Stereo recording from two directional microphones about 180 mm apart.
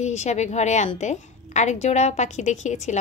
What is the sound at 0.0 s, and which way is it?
A woman's voice, 40° left (ahead or behind).